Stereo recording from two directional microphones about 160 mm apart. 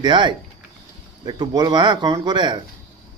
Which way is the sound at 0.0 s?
30° right (ahead or behind).